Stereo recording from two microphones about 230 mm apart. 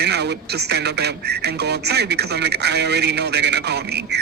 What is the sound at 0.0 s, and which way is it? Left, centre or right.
Speech, right.